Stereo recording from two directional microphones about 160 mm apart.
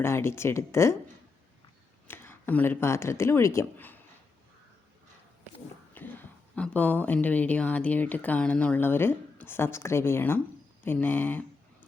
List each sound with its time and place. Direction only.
0.0 s speech: 15° left (ahead or behind)
2.0 s speech: 15° left (ahead or behind)
5.9 s speech: 10° left (ahead or behind)